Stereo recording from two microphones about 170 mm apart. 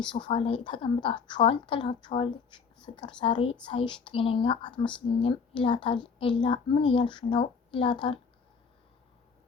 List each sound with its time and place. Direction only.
0.0 s a woman's voice: 30° left (ahead or behind)